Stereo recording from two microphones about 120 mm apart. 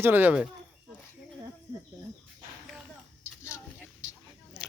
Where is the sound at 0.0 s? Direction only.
15° right (ahead or behind).